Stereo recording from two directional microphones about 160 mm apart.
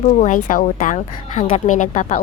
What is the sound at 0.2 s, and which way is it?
A woman's voice, 50° left (ahead or behind).